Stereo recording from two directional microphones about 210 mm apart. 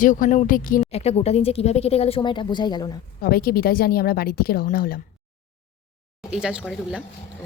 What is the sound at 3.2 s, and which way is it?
Speech, 45° left (ahead or behind).